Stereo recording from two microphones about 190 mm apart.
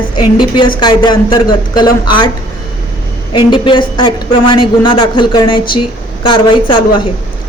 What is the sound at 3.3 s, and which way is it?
Speech, 25° left (ahead or behind).